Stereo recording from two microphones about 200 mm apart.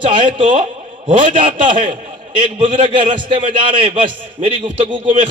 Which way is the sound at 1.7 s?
25° right (ahead or behind).